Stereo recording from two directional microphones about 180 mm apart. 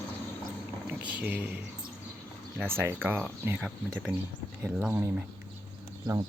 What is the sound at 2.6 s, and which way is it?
Speech, 15° right (ahead or behind).